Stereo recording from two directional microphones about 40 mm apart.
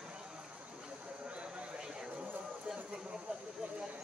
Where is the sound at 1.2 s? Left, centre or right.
Right.